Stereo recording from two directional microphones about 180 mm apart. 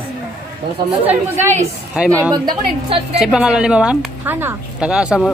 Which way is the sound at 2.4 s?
30° right (ahead or behind).